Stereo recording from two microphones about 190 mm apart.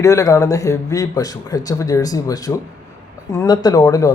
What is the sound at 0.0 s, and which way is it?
Speech, 15° left (ahead or behind).